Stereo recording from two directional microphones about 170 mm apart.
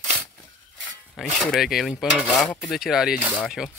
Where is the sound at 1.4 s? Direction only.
Centre (ahead or behind).